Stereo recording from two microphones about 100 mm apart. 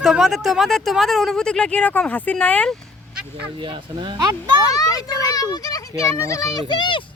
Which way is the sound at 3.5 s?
55° right (ahead or behind).